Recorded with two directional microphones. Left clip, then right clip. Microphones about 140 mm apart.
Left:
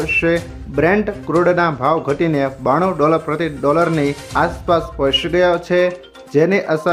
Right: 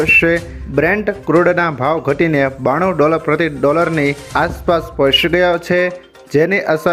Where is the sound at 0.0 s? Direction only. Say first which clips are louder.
Right 5 dB; 25° right (ahead or behind).